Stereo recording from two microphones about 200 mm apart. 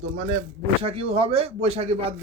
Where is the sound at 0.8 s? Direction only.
30° right (ahead or behind).